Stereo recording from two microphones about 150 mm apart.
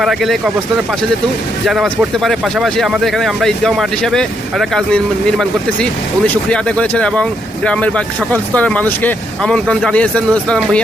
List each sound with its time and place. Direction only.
0.0 s speech: centre (ahead or behind)